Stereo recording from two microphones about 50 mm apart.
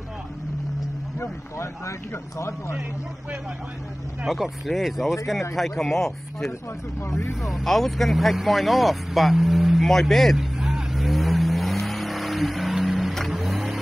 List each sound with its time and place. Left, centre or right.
1.6 s speech: left
4.3 s speech: centre
5.6 s speech: centre
7.6 s speech: centre
9.8 s speech: centre
10.3 s vehicle: centre
13.4 s vehicle: centre